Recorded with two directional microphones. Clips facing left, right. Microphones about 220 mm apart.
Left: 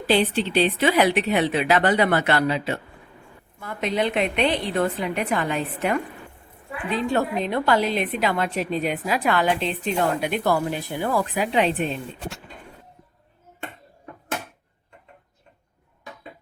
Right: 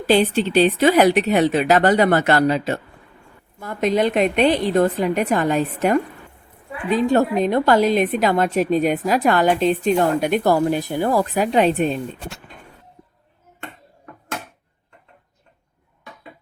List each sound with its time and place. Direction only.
0.1 s a woman's voice: 45° right (ahead or behind)